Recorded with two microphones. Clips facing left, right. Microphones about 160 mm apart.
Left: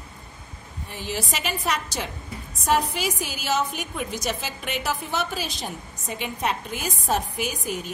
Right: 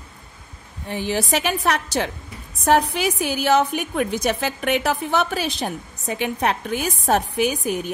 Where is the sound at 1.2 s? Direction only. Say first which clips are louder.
Right 6 dB; 65° right (ahead or behind).